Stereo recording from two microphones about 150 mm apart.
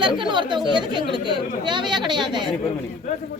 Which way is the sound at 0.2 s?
30° right (ahead or behind).